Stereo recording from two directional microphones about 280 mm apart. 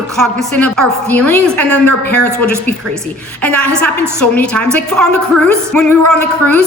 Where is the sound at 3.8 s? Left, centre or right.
Centre.